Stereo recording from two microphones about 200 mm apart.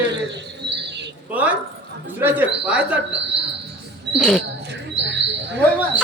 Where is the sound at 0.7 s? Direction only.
60° right (ahead or behind).